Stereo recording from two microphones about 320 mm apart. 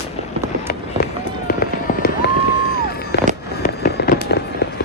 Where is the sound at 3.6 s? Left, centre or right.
Left.